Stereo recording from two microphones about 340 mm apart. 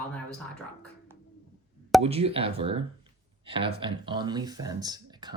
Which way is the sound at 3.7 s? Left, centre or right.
Centre.